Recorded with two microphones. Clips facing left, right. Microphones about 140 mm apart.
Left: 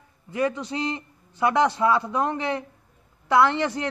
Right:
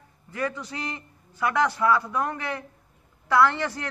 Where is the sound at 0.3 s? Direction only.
20° left (ahead or behind).